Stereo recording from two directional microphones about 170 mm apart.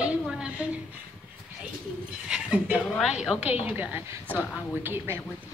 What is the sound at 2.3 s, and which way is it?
A woman's voice, 5° right (ahead or behind).